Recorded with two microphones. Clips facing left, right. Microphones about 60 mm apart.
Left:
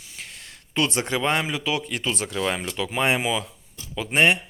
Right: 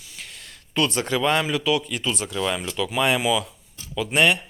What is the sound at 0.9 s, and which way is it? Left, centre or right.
Speech, left.